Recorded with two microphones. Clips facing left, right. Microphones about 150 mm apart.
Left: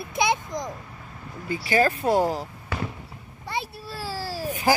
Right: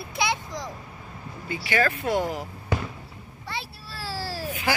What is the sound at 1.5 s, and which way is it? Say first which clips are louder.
Speech: left 3 dB; 35° left (ahead or behind).